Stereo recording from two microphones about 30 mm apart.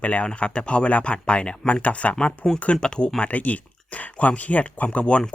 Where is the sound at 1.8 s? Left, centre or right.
Left.